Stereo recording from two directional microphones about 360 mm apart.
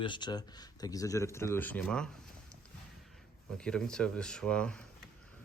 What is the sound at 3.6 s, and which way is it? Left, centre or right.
Speech, centre.